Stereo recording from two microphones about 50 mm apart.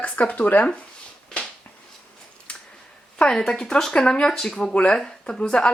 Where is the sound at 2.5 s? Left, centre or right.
Left.